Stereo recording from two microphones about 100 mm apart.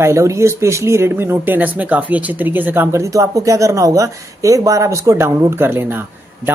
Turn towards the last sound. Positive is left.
turn(degrees=-20)  # may be behind; listen again after turning